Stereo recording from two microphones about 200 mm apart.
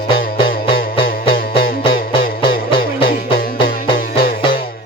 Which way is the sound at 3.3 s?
50° left (ahead or behind).